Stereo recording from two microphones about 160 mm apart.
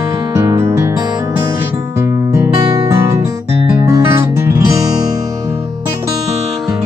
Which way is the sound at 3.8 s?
20° right (ahead or behind).